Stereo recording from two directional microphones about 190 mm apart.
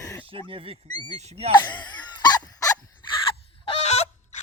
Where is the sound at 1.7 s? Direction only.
20° left (ahead or behind).